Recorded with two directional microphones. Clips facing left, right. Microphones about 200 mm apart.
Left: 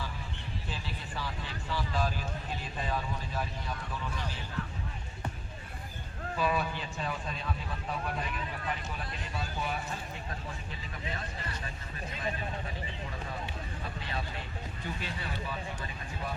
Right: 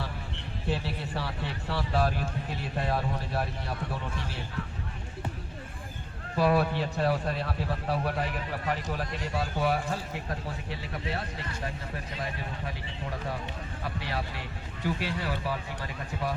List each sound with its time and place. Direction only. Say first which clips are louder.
0.7 s a man's voice: right 12 dB; 65° right (ahead or behind)
6.3 s a man's voice: right 7 dB; 70° right (ahead or behind)
13.8 s a man's voice: right 6 dB; 75° right (ahead or behind)